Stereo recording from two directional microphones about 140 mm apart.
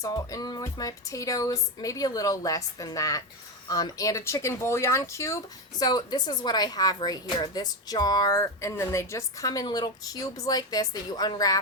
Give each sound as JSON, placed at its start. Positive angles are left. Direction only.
{"t": 0.0, "sound": "speech", "side_deg": 25}